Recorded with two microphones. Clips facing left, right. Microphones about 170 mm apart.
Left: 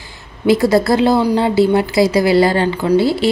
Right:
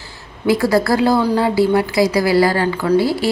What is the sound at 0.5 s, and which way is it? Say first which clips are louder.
A woman's voice: left 2 dB; 20° left (ahead or behind).